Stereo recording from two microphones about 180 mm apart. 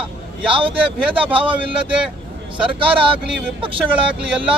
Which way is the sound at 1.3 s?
30° right (ahead or behind).